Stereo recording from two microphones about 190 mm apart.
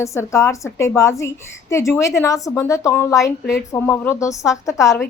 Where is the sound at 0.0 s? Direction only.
15° left (ahead or behind).